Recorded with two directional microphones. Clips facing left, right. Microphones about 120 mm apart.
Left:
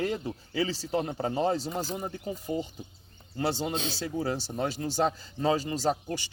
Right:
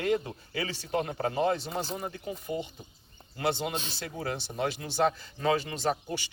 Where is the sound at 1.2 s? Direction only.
30° left (ahead or behind).